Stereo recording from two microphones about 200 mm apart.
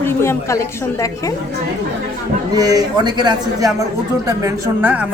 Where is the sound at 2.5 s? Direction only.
20° right (ahead or behind).